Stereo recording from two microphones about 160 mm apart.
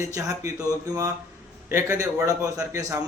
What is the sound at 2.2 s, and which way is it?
Speech, 20° right (ahead or behind).